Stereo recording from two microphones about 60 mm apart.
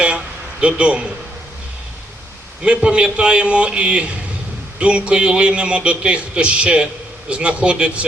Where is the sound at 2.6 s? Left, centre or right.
Centre.